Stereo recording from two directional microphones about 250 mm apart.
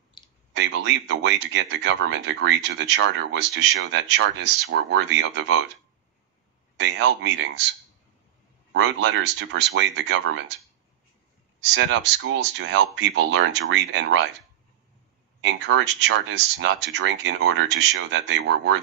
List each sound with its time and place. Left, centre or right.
0.2 s clicking: centre
0.5 s speech: right
6.8 s speech: right
8.7 s speech: right
11.6 s speech: right
15.4 s speech: right